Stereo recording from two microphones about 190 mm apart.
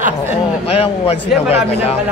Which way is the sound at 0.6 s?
30° left (ahead or behind).